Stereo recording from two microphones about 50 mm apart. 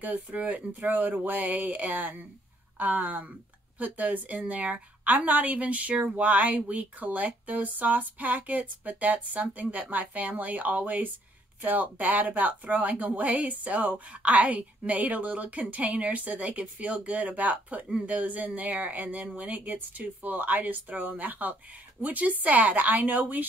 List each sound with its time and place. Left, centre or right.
0.0 s speech: right